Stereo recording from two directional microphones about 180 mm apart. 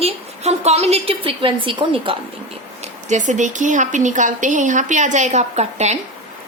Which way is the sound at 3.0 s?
45° right (ahead or behind).